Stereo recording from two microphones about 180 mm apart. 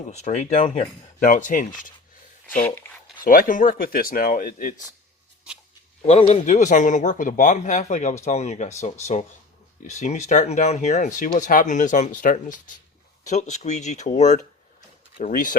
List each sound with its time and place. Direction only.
0.0 s a man's voice: 40° left (ahead or behind)
3.2 s a man's voice: 50° left (ahead or behind)
6.1 s a man's voice: 35° left (ahead or behind)